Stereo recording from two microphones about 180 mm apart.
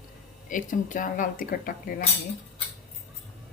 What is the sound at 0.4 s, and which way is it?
Speech, 45° left (ahead or behind).